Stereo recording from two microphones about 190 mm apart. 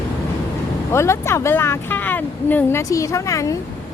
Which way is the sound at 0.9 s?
15° left (ahead or behind).